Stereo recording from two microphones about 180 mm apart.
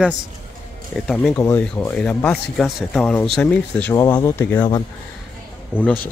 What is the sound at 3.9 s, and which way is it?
Speech, 15° left (ahead or behind).